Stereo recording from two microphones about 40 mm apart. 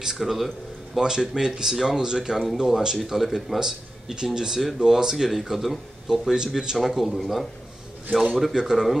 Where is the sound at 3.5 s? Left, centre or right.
Centre.